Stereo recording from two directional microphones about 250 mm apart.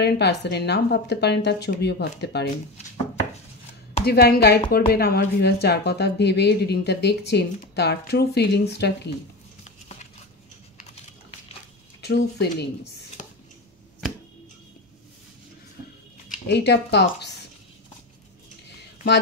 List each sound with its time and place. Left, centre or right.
0.0 s speech: left
4.0 s speech: left
12.0 s speech: left
16.4 s speech: left